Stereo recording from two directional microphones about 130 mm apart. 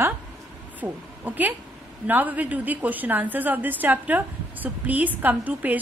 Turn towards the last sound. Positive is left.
turn(degrees=-10)  # may be behind; listen again after turning